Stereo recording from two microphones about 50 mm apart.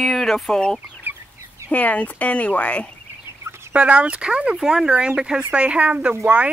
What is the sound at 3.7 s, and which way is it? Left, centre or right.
Speech, right.